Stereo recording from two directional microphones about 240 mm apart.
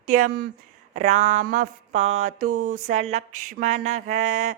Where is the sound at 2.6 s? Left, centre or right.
Right.